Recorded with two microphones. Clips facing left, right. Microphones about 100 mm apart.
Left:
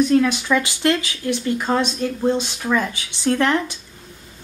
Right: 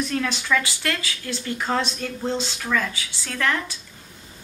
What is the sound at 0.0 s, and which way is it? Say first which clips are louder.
Speech: left 9 dB; 15° left (ahead or behind).